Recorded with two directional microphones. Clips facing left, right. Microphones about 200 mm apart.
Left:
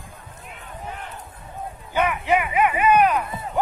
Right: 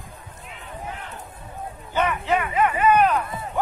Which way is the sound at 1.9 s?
10° left (ahead or behind).